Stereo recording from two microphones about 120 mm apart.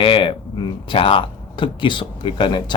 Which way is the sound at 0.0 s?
45° left (ahead or behind).